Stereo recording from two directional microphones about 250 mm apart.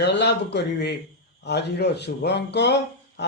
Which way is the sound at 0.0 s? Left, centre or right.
Left.